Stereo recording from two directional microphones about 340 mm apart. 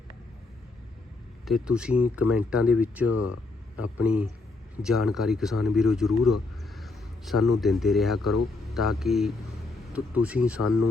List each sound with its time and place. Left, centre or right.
1.5 s speech: centre
6.2 s a sound: centre
7.6 s speech: centre
10.6 s speech: left